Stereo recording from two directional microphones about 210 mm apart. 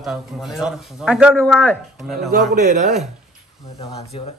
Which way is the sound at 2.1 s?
50° right (ahead or behind).